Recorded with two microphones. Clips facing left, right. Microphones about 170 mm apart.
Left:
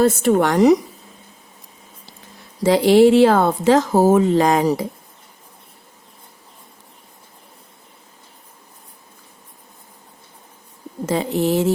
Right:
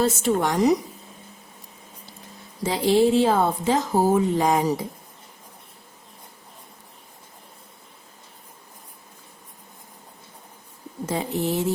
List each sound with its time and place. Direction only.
0.0 s a woman's voice: 55° left (ahead or behind); by 0.8 s 75° left (ahead or behind)
2.6 s a woman's voice: 80° left
11.0 s speech: 90° left